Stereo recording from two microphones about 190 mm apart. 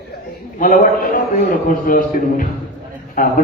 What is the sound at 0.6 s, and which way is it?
A man's voice, 50° left (ahead or behind).